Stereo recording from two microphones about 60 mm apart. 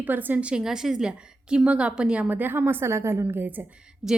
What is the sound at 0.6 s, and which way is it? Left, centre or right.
A woman's voice, centre.